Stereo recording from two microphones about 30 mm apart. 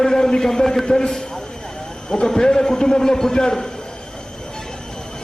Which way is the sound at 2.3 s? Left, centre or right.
Centre.